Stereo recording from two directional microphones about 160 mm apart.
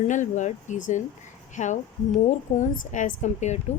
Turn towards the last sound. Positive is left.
turn(degrees=45)  # may be behind; listen again after turning